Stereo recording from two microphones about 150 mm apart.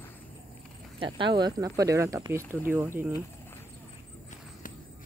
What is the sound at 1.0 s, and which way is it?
Speech, 35° right (ahead or behind).